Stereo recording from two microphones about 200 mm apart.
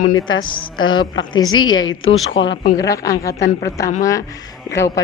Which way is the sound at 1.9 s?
75° left (ahead or behind).